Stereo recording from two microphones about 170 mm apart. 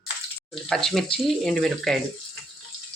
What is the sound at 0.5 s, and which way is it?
Speech, centre (ahead or behind).